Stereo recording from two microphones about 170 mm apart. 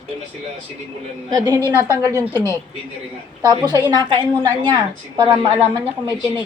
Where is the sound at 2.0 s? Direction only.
20° right (ahead or behind).